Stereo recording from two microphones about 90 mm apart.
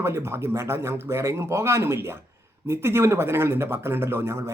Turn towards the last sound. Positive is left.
turn(degrees=-30)  # may be behind; listen again after turning